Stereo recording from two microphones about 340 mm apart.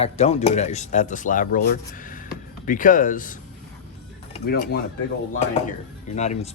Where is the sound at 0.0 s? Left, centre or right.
Centre.